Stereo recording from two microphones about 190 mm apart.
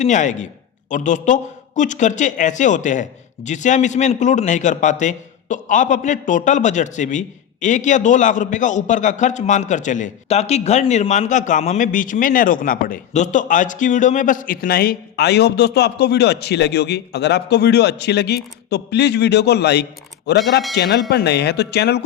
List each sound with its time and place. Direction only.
0.0 s a man's voice: 40° left (ahead or behind); by 22.0 s 60° left (ahead or behind)